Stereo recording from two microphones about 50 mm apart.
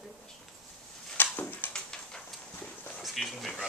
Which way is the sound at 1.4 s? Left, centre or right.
Left.